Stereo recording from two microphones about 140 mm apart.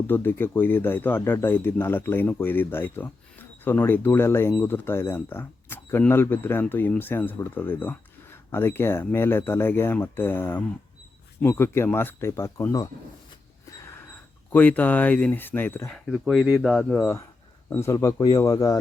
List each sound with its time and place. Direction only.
0.1 s speech: 15° left (ahead or behind)
14.5 s speech: 10° left (ahead or behind)
15.9 s speech: 5° left (ahead or behind)
17.7 s speech: 20° left (ahead or behind)